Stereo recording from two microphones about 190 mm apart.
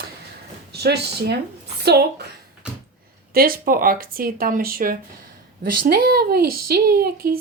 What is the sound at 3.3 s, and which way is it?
Speech, 50° right (ahead or behind).